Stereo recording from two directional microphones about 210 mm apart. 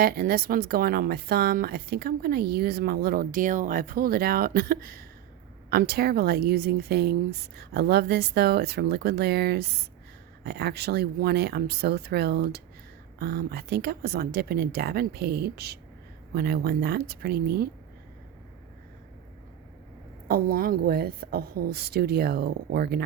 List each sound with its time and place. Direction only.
0.0 s speech: 45° right (ahead or behind)
20.2 s speech: 45° right (ahead or behind)